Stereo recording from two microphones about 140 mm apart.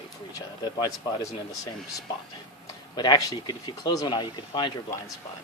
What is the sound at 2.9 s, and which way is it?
Speech, 30° left (ahead or behind).